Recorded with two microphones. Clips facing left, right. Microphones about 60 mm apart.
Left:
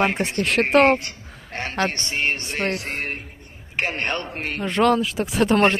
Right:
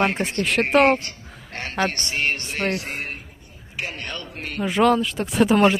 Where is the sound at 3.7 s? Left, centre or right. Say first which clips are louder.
Left 6 dB; left.